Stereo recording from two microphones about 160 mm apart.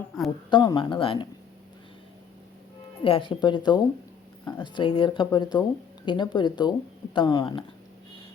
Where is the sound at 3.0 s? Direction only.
30° left (ahead or behind).